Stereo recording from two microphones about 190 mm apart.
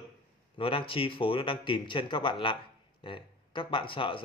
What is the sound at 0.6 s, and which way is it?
Speech, 30° left (ahead or behind).